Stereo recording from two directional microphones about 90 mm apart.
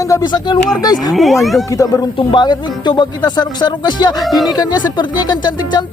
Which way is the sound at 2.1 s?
60° left (ahead or behind).